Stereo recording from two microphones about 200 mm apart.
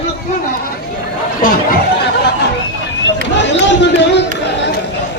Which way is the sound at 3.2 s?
60° left (ahead or behind).